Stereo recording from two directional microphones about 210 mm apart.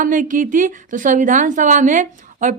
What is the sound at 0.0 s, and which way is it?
A woman's voice, 40° right (ahead or behind).